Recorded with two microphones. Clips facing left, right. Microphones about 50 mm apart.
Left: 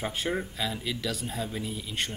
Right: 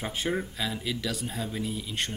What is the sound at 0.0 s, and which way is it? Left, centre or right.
Speech, centre.